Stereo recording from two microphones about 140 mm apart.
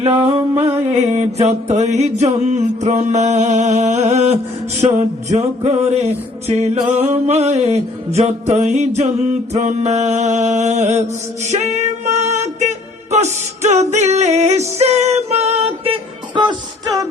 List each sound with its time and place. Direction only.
0.0 s music: 45° right (ahead or behind)
1.1 s mantra: 55° right (ahead or behind)
4.8 s music: 50° right (ahead or behind); by 17.1 s 30° right (ahead or behind)